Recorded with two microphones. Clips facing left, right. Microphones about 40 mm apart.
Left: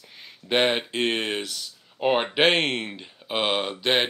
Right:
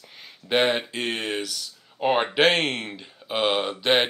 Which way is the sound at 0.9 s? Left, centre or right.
Left.